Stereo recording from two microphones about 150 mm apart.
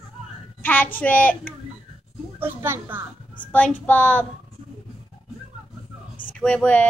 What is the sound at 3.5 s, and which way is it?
Speech, 10° left (ahead or behind).